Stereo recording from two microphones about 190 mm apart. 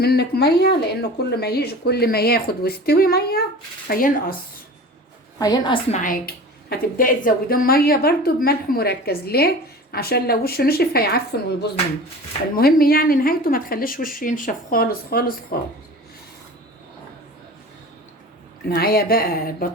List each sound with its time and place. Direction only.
0.0 s a woman's voice: 55° left (ahead or behind)
5.4 s a woman's voice: 20° left (ahead or behind)
5.9 s a woman's voice: 45° left (ahead or behind)
18.7 s speech: 55° left (ahead or behind)